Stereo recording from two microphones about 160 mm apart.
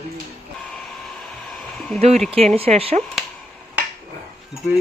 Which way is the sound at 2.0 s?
40° right (ahead or behind).